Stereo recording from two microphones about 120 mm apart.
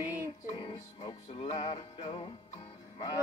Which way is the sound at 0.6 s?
40° left (ahead or behind).